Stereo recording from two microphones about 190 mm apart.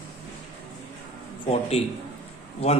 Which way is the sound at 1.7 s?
30° left (ahead or behind).